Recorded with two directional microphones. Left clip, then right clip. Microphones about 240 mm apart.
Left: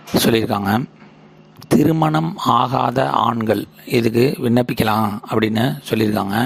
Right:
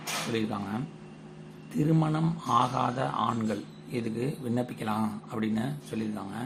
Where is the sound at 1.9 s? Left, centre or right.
Left.